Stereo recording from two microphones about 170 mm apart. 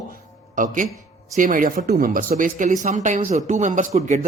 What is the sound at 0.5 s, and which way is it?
Speech, 50° right (ahead or behind).